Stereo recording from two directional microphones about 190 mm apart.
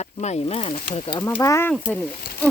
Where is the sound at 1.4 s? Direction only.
15° left (ahead or behind).